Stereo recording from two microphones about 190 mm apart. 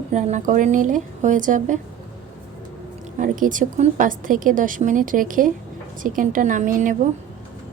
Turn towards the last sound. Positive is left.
turn(degrees=-40)  # may be behind; listen again after turning